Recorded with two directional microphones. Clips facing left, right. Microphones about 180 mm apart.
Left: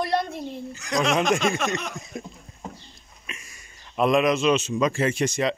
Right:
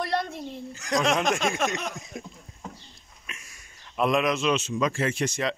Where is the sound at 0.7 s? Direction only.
45° right (ahead or behind).